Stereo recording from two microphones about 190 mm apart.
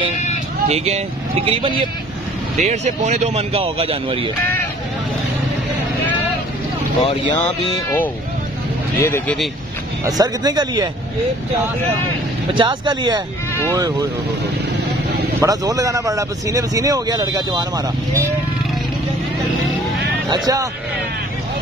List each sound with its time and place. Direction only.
0.7 s speech: 35° right (ahead or behind)
7.7 s speech: 10° left (ahead or behind)
10.0 s speech: 20° right (ahead or behind)
12.5 s speech: 25° right (ahead or behind)
15.4 s speech: 20° right (ahead or behind)
20.2 s speech: 20° right (ahead or behind)